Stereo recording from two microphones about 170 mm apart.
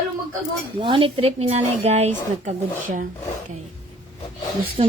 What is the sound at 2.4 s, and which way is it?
Speech, 50° right (ahead or behind).